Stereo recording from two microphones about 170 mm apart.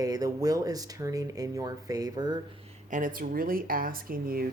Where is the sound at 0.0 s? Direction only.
20° right (ahead or behind).